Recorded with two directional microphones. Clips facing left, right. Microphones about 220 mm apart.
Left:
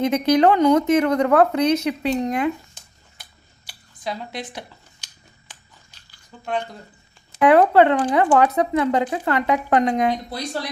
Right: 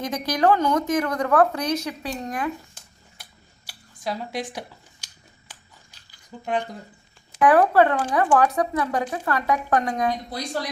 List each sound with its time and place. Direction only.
0.0 s speech: 25° left (ahead or behind)
2.8 s a sound: 10° right (ahead or behind)
3.7 s scissors: 5° right (ahead or behind)
5.5 s biting: 10° right (ahead or behind)
6.4 s speech: 15° right (ahead or behind)
7.4 s speech: 25° left (ahead or behind)